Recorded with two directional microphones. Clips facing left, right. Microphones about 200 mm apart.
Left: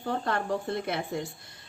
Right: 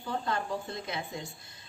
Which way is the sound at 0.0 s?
60° left (ahead or behind).